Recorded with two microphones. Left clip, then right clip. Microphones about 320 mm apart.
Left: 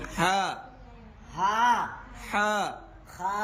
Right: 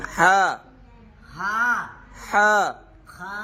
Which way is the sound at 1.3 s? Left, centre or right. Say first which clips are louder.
Right 1 dB; left.